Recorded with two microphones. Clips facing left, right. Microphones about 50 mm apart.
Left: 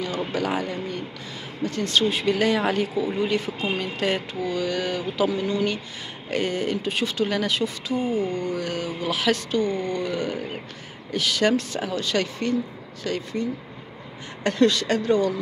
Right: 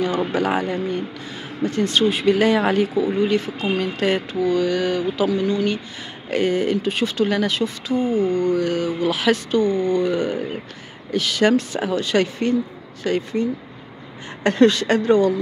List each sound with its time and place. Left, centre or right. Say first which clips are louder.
0.0 s speech: right 6 dB; right; by 10.0 s centre
10.0 s speech: right 6 dB; centre
11.1 s speech: right 4 dB; centre; by 12.5 s right
13.0 s speech: right 6 dB; right
14.4 s speech: right 5 dB; right